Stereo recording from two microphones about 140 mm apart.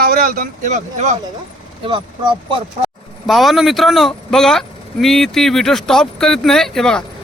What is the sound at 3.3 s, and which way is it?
Speech, centre (ahead or behind).